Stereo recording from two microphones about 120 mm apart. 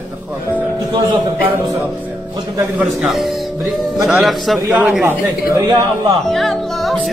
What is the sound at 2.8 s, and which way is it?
A man's voice, centre (ahead or behind).